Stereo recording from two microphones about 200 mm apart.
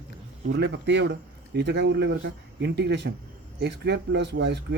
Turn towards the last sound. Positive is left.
turn(degrees=-60)  # may be behind; listen again after turning